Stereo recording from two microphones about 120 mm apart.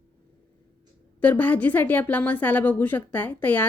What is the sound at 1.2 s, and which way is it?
A woman's voice, 15° left (ahead or behind).